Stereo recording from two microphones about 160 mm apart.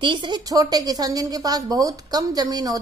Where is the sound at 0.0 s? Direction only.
30° right (ahead or behind).